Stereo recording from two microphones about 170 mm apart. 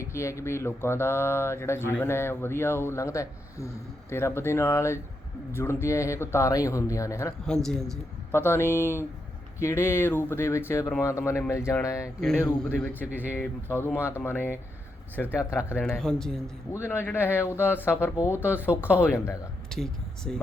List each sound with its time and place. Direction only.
0.0 s speech: 15° left (ahead or behind)
7.4 s speech: 5° left (ahead or behind)
8.4 s speech: 15° left (ahead or behind)
12.5 s speech: 5° left (ahead or behind)
15.8 s speech: 5° left (ahead or behind)
16.7 s speech: 15° left (ahead or behind)
19.7 s speech: 5° left (ahead or behind)